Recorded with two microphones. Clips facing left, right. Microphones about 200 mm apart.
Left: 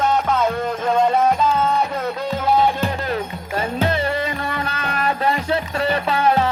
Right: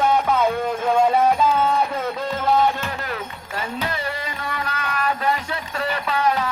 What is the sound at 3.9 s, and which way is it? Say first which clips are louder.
Music: left 7 dB; 25° left (ahead or behind).